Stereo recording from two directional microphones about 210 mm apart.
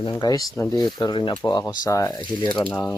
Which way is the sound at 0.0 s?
20° left (ahead or behind).